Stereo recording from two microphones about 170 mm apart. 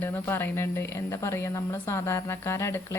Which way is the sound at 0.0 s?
15° left (ahead or behind).